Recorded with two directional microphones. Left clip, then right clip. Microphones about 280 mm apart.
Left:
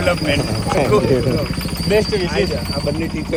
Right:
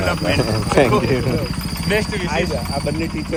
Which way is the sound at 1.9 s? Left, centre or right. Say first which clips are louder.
Left 4 dB; right.